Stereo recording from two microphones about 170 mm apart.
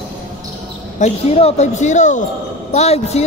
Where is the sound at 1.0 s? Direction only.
40° left (ahead or behind).